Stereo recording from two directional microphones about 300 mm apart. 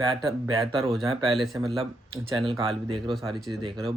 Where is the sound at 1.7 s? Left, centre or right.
Centre.